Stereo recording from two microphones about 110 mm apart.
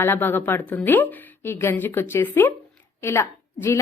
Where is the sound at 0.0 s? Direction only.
20° left (ahead or behind).